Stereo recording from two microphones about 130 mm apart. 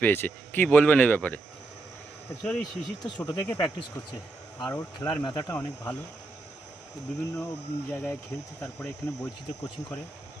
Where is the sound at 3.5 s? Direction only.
35° left (ahead or behind).